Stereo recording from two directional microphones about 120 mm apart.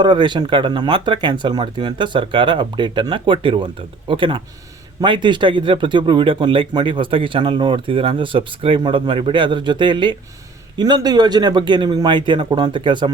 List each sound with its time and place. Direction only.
0.0 s speech: 40° right (ahead or behind)